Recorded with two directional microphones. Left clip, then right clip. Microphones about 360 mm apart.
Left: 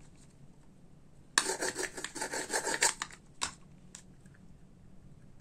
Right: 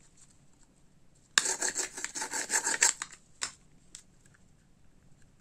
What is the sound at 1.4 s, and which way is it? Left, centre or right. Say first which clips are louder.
Filing: right 1 dB; centre.